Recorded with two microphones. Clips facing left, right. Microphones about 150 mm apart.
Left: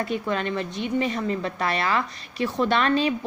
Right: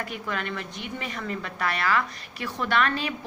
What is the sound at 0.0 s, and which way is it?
A woman's voice, 25° left (ahead or behind).